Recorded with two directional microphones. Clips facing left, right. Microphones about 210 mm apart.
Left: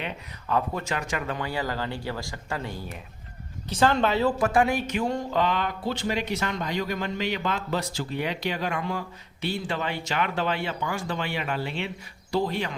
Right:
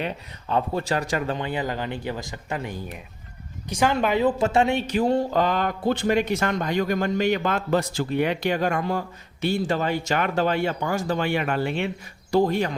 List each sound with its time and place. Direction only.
0.4 s speech: 30° right (ahead or behind)
1.4 s speech: 20° right (ahead or behind); by 12.7 s 45° right (ahead or behind)